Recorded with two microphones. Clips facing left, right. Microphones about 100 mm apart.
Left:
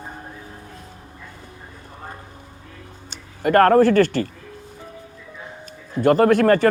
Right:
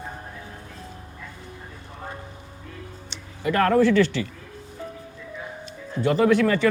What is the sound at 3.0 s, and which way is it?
Speech, 50° left (ahead or behind).